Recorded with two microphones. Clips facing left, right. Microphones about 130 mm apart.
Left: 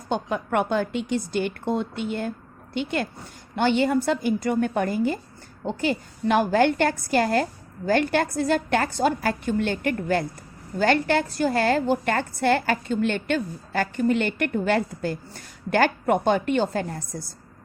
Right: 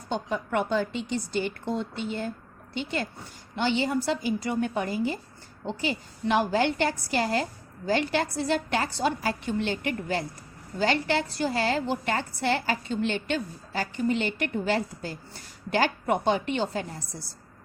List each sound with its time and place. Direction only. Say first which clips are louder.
0.1 s a woman's voice: left 3 dB; 55° left (ahead or behind)